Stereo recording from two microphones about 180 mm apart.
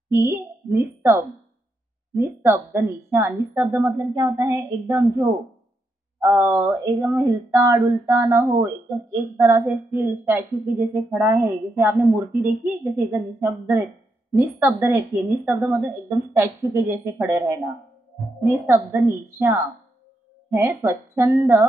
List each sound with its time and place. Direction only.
0.1 s a child's voice: 15° right (ahead or behind)